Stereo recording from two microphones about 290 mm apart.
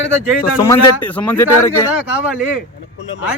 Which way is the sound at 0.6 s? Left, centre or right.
Centre.